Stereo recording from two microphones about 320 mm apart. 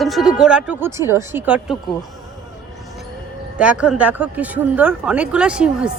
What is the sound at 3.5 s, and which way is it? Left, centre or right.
A woman's voice, centre.